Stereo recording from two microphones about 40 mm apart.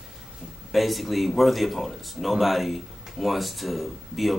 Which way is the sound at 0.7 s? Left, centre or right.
Centre.